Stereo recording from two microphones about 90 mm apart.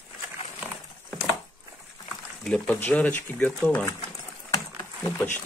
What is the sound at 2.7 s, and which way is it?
Speech, 20° left (ahead or behind).